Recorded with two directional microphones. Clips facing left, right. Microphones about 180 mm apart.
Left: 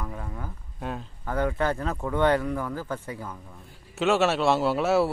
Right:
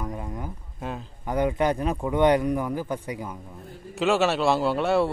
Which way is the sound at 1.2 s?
15° right (ahead or behind).